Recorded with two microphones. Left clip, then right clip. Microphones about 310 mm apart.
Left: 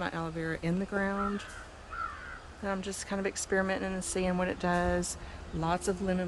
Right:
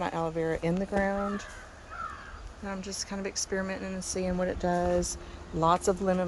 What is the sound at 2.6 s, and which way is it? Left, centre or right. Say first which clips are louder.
Speech: left 2 dB; centre.